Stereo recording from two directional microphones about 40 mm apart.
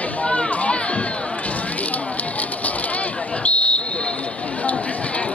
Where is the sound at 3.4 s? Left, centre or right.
Left.